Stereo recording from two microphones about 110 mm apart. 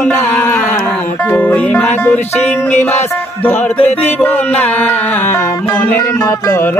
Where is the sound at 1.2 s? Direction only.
15° left (ahead or behind).